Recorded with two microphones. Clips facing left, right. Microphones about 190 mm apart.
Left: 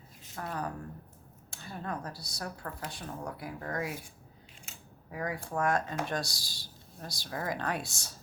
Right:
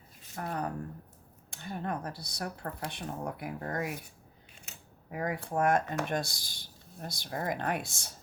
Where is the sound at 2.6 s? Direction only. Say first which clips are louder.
Right 2 dB; 35° right (ahead or behind).